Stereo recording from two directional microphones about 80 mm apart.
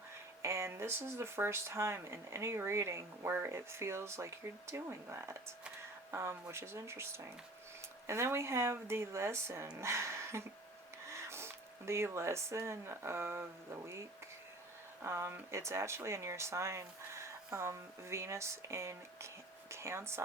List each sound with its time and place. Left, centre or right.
0.4 s speech: right
15.0 s speech: right